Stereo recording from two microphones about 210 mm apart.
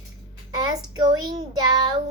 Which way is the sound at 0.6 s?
20° right (ahead or behind).